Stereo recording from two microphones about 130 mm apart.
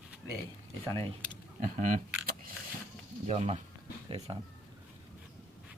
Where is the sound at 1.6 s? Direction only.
90° right.